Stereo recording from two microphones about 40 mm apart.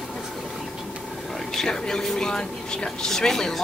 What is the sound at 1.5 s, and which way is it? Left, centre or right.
A man's voice, centre.